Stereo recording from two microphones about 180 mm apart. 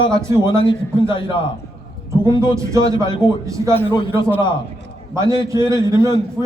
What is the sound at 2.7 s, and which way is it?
A man's voice, 20° right (ahead or behind).